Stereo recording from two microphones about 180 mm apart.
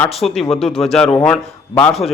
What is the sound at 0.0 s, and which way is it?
A man's voice, centre (ahead or behind).